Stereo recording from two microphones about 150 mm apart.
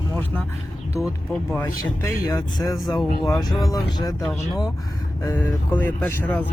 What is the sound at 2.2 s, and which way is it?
Speech, 25° left (ahead or behind).